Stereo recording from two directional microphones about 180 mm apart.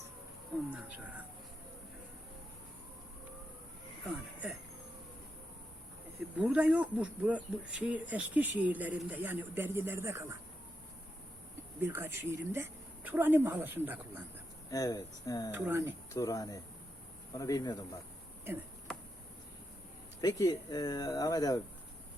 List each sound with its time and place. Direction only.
0.7 s speech: 10° right (ahead or behind)
4.0 s speech: 10° right (ahead or behind)
6.4 s speech: 5° right (ahead or behind)
11.8 s speech: 10° right (ahead or behind)
14.7 s speech: 20° left (ahead or behind)
15.5 s speech: 10° right (ahead or behind)
16.1 s speech: 20° left (ahead or behind)
20.2 s speech: 20° left (ahead or behind)